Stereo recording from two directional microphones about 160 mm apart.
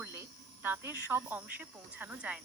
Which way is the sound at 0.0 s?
15° right (ahead or behind).